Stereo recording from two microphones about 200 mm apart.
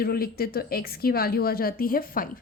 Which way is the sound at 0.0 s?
50° left (ahead or behind).